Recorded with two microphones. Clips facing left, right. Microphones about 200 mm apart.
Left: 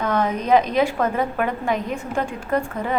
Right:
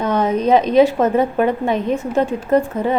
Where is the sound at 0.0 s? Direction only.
20° right (ahead or behind).